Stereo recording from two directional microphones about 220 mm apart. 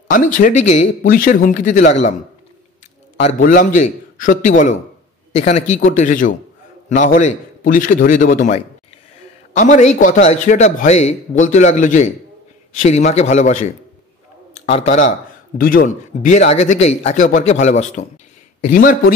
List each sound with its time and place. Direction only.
0.1 s a man's voice: 35° left (ahead or behind)
3.2 s a man's voice: 35° left (ahead or behind)